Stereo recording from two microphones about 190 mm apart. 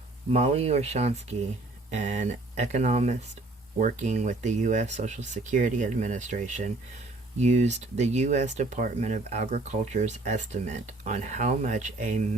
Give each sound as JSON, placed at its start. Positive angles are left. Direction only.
{"t": 0.3, "sound": "speech", "side_deg": -35}